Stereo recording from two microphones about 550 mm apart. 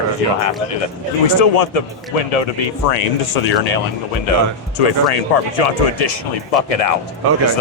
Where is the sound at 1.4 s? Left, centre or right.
Left.